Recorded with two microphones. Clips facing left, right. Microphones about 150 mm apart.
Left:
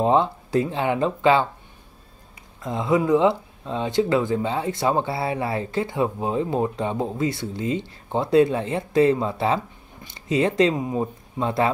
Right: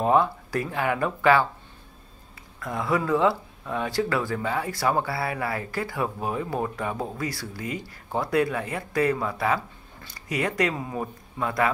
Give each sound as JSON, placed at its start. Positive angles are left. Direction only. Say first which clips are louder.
{"t": 0.0, "sound": "speech", "louder": "left 2 dB", "side_deg": 25}
{"t": 2.6, "sound": "speech", "louder": "left 5 dB", "side_deg": 20}